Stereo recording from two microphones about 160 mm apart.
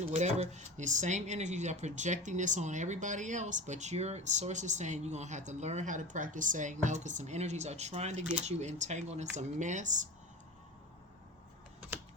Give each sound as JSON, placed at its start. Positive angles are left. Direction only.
{"t": 0.1, "sound": "speech", "side_deg": -45}